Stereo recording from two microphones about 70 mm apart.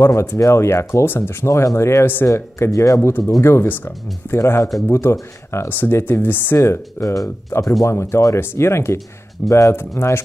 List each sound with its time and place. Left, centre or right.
0.0 s speech: left
1.5 s speech: left
3.0 s speech: left
9.5 s speech: left
9.8 s speech: left